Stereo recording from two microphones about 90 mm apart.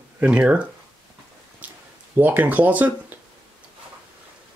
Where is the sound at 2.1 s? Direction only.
20° right (ahead or behind).